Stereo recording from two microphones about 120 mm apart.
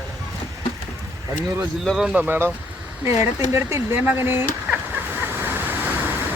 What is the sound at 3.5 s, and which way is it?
Speech, 20° right (ahead or behind).